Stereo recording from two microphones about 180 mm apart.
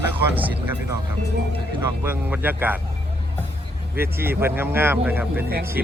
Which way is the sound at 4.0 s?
15° right (ahead or behind).